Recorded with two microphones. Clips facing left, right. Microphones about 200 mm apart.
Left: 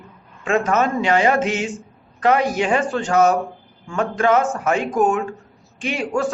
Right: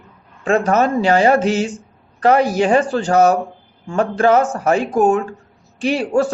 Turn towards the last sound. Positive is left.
turn(degrees=-35)  # may be behind; listen again after turning